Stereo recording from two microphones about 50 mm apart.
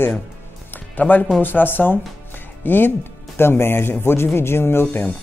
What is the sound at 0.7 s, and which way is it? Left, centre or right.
Music, left.